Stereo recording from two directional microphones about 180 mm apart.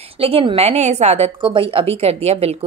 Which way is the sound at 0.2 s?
30° right (ahead or behind).